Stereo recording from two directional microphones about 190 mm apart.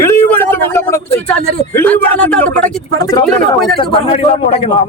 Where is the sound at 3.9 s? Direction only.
30° left (ahead or behind).